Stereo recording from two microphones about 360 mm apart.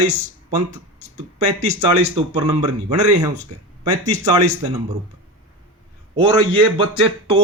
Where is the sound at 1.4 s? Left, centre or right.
Centre.